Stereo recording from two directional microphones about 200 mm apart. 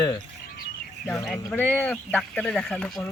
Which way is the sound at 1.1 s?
Centre (ahead or behind).